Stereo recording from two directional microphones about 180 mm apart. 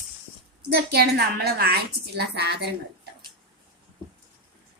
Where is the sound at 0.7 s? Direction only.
60° right (ahead or behind).